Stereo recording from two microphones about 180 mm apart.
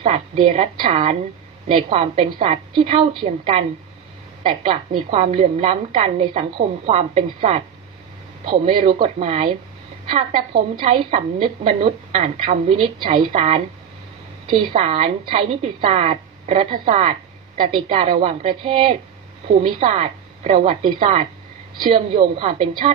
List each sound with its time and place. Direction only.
0.0 s a woman's voice: 30° right (ahead or behind)
21.8 s a woman's voice: 25° right (ahead or behind)